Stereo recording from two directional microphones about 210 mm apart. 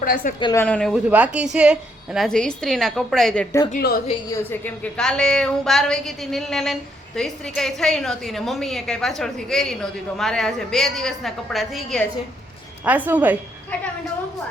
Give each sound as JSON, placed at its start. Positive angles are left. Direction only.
{"t": 0.0, "sound": "a woman's voice", "side_deg": 40}
{"t": 0.3, "sound": "speech", "side_deg": 20}
{"t": 0.6, "sound": "a woman's voice", "side_deg": 5}
{"t": 3.8, "sound": "a woman's voice", "side_deg": 45}
{"t": 4.9, "sound": "a woman's voice", "side_deg": 5}